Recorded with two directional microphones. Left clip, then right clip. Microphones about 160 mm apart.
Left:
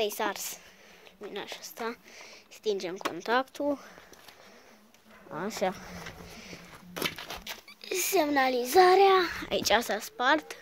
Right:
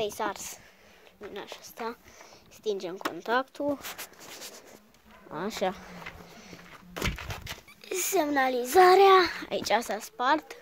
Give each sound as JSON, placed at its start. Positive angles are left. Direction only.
{"t": 0.0, "sound": "speech", "side_deg": 5}
{"t": 5.3, "sound": "speech", "side_deg": -15}
{"t": 8.8, "sound": "a child's voice", "side_deg": -20}
{"t": 9.5, "sound": "speech", "side_deg": 5}